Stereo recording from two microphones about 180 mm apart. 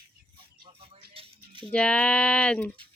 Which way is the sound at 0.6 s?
30° right (ahead or behind).